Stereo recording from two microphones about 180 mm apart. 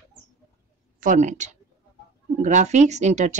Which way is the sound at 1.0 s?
40° right (ahead or behind).